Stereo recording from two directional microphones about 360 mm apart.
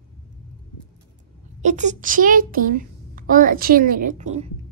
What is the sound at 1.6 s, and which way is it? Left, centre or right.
A child's voice, centre.